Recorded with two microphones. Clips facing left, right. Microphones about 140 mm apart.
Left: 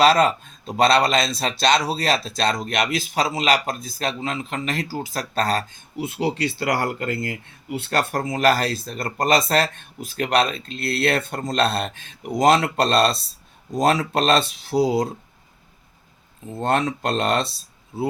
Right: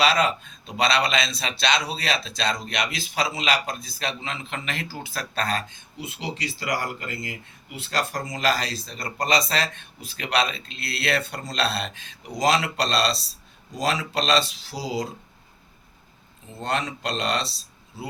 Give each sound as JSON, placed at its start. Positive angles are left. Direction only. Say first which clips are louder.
{"t": 0.0, "sound": "speech", "louder": "left 5 dB", "side_deg": 45}
{"t": 6.0, "sound": "speech", "louder": "left 9 dB", "side_deg": 55}
{"t": 16.6, "sound": "speech", "louder": "left 6 dB", "side_deg": 50}